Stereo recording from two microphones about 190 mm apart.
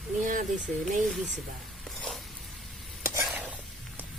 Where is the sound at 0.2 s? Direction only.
40° right (ahead or behind).